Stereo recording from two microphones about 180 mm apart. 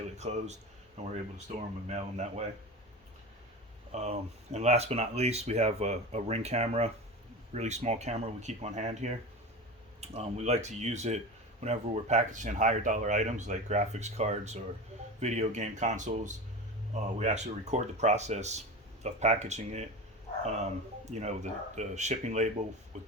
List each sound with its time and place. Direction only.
0.2 s speech: 40° right (ahead or behind)
3.9 s speech: 40° right (ahead or behind)